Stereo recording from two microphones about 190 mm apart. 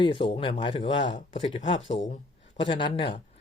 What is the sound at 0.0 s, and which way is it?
A man's voice, 25° left (ahead or behind).